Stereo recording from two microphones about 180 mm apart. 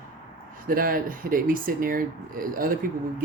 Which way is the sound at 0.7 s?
50° right (ahead or behind).